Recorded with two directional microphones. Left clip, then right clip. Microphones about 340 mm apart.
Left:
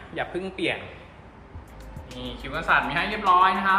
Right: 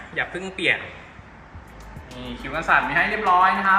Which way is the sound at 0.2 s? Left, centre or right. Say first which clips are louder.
Right 3 dB; centre.